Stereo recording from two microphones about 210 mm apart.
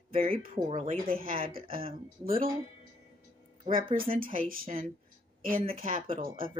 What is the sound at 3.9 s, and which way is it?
Speech, 40° right (ahead or behind).